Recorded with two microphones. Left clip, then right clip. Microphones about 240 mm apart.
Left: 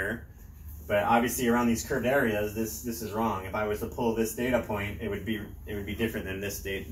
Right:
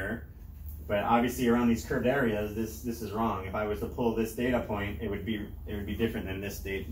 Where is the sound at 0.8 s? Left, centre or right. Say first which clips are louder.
Left 2 dB; centre.